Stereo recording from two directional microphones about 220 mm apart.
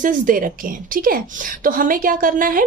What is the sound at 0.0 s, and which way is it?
A woman's voice, 40° right (ahead or behind).